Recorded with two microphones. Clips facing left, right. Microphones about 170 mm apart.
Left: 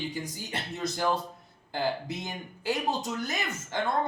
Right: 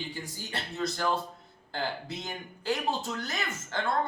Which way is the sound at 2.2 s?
15° left (ahead or behind).